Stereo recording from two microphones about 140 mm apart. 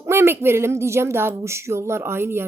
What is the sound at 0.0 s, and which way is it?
Speech, 15° right (ahead or behind).